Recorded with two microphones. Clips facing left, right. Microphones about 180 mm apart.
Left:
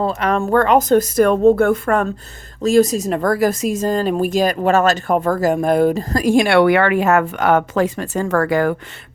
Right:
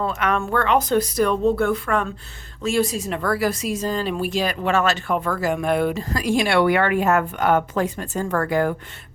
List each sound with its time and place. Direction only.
0.0 s speech: 35° left (ahead or behind); by 8.7 s 90° left